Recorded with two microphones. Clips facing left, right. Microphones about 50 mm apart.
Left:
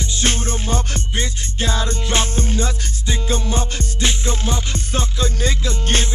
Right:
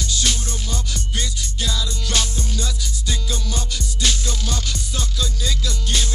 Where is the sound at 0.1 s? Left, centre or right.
Left.